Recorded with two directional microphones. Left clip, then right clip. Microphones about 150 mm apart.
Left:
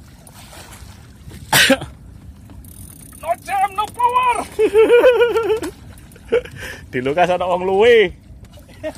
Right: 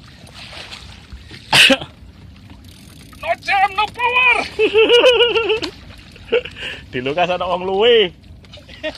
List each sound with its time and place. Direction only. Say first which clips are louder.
0.4 s boat: right 7 dB; centre (ahead or behind)
1.5 s cough: right 3 dB; 30° left (ahead or behind)
3.2 s a sound: right 3 dB; 15° left (ahead or behind)
6.2 s speech: even; 25° left (ahead or behind); by 8.1 s 45° left (ahead or behind)